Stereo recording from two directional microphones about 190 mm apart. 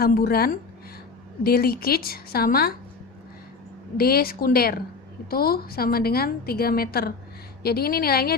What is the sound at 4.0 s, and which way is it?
A woman's voice, 55° left (ahead or behind).